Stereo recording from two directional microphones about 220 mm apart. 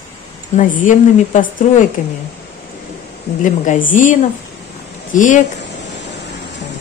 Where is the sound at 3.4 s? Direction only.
35° left (ahead or behind).